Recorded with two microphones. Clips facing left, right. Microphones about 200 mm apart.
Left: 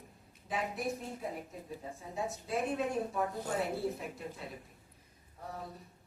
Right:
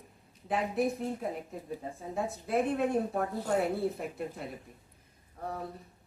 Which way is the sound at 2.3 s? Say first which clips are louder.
Right 5 dB; 55° right (ahead or behind).